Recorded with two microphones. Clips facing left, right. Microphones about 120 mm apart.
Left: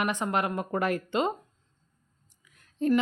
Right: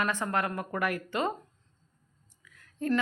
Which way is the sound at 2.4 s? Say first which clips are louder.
Left 4 dB; 20° left (ahead or behind).